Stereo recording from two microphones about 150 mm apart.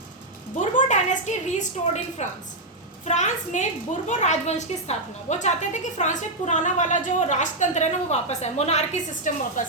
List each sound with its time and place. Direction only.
0.5 s a woman's voice: 55° left (ahead or behind)
9.6 s speech: 55° left (ahead or behind)